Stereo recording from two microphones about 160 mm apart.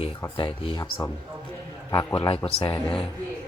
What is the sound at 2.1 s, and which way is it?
Speech, 35° left (ahead or behind).